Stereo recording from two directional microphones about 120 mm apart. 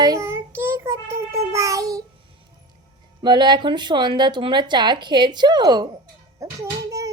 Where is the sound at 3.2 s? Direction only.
40° right (ahead or behind).